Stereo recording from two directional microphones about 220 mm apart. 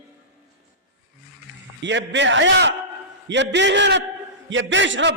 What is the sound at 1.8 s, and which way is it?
A man's voice, 55° right (ahead or behind).